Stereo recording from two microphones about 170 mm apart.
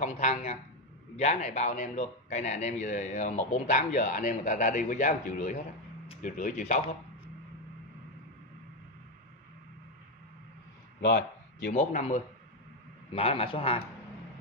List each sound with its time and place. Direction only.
0.0 s a man's voice: 40° left (ahead or behind)
11.0 s a sound: 80° left
11.7 s speech: 45° left (ahead or behind)
13.1 s a man's voice: 35° left (ahead or behind)